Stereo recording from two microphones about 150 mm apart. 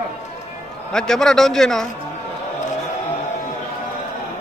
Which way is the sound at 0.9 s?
5° left (ahead or behind).